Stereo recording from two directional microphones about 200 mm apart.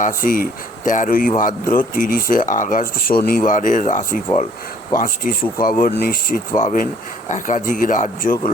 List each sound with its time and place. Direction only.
0.0 s speech: 45° left (ahead or behind)